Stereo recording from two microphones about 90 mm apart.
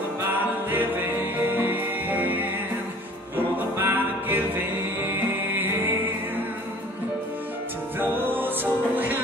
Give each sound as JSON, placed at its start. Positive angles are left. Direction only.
{"t": 0.7, "sound": "music", "side_deg": -20}
{"t": 3.5, "sound": "music", "side_deg": -20}
{"t": 8.0, "sound": "music", "side_deg": -25}